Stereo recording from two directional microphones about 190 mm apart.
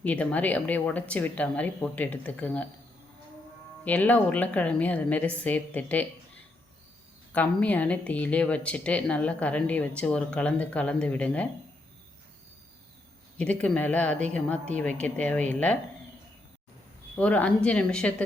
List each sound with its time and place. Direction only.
0.0 s speech: 5° left (ahead or behind)
3.8 s speech: 10° left (ahead or behind)
7.3 s speech: 10° left (ahead or behind)
13.4 s speech: 5° left (ahead or behind)
17.2 s speech: 5° left (ahead or behind)